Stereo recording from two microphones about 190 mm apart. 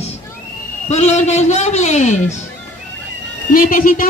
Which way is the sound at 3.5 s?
45° left (ahead or behind).